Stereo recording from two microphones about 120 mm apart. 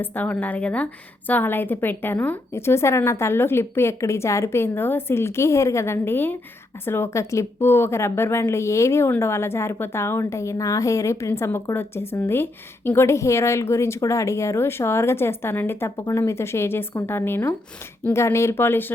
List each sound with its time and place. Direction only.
0.0 s a woman's voice: 15° left (ahead or behind)